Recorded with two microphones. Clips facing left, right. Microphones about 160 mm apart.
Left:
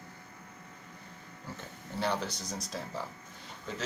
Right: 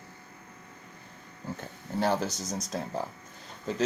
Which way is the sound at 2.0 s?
45° right (ahead or behind).